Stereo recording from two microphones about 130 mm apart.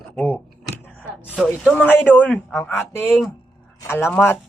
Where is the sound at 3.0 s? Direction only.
5° right (ahead or behind).